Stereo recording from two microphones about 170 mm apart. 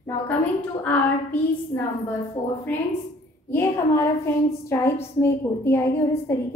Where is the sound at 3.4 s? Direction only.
15° left (ahead or behind).